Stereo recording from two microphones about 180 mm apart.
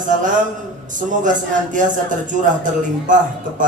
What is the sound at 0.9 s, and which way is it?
A man's voice, 45° right (ahead or behind).